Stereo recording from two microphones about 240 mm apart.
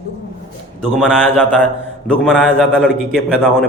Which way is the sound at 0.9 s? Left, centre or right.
Centre.